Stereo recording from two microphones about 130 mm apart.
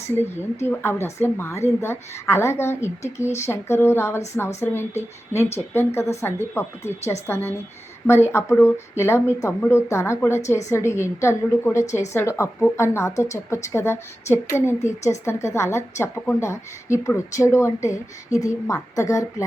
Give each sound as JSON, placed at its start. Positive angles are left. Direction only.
{"t": 0.1, "sound": "a woman's voice", "side_deg": 15}